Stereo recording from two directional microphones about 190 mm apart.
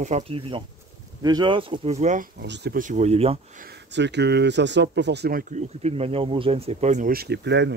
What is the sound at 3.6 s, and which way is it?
Speech, 60° right (ahead or behind).